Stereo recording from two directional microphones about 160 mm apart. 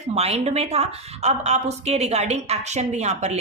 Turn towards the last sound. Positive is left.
turn(degrees=-45)  # may be behind; listen again after turning